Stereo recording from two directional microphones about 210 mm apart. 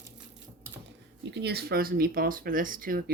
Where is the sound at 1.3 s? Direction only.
50° right (ahead or behind).